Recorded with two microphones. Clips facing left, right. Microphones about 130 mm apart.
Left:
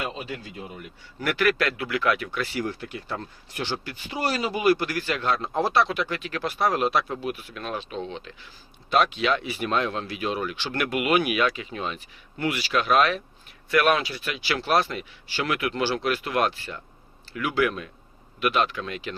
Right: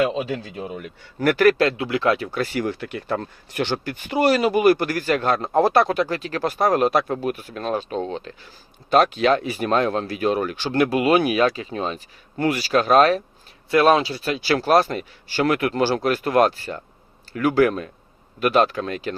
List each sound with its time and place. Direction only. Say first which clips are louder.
1.2 s speech: right 7 dB; 45° right (ahead or behind)
1.5 s speech: right 6 dB; 25° right (ahead or behind)
2.4 s speech: right 5 dB; 55° right (ahead or behind)
10.7 s a man's voice: right 6 dB; 30° right (ahead or behind)
13.7 s a man's voice: right 5 dB; 30° right (ahead or behind)